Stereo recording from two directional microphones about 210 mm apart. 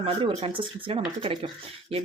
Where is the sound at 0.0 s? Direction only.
25° right (ahead or behind).